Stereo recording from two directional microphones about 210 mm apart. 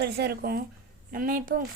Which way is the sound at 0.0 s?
50° right (ahead or behind).